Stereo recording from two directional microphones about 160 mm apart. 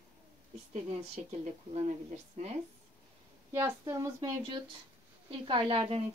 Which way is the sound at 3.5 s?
20° right (ahead or behind).